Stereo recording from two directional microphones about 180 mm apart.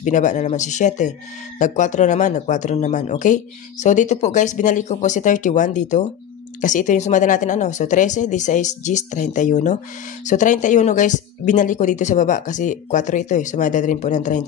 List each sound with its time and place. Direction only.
0.0 s speech: 45° left (ahead or behind)